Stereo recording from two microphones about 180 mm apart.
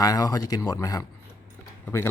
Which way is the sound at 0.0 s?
20° left (ahead or behind).